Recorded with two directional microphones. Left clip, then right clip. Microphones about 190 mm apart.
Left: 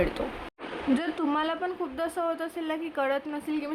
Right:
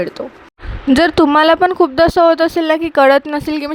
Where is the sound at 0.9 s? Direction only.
50° right (ahead or behind).